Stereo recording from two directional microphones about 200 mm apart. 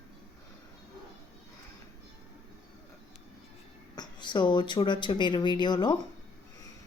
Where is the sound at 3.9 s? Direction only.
20° left (ahead or behind).